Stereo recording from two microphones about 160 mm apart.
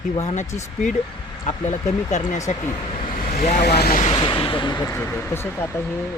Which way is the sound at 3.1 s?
65° left (ahead or behind).